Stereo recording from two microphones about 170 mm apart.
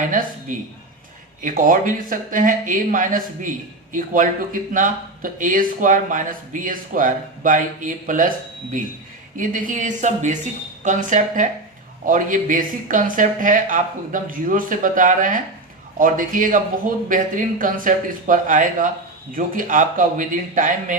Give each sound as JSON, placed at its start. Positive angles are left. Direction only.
{"t": 0.1, "sound": "a woman's voice", "side_deg": -50}
{"t": 9.3, "sound": "speech", "side_deg": -50}